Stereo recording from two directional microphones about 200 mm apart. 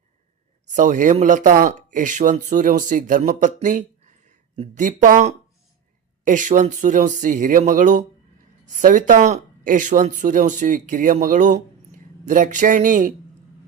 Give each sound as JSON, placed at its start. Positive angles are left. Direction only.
{"t": 0.7, "sound": "speech", "side_deg": -40}